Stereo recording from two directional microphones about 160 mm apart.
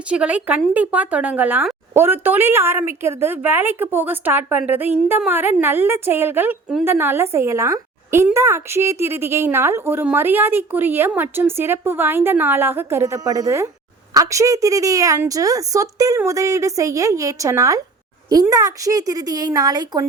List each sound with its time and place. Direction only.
0.1 s a woman's voice: 10° right (ahead or behind); by 20.1 s 25° right (ahead or behind)